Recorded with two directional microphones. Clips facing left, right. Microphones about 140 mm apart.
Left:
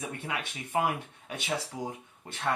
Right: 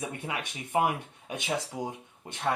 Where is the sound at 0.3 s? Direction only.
15° right (ahead or behind).